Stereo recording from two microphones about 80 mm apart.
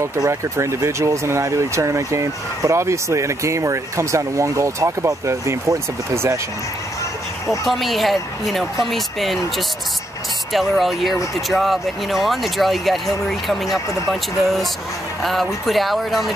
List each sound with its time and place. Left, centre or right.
0.0 s speech: right
7.6 s speech: centre
10.5 s speech: centre
15.2 s speech: centre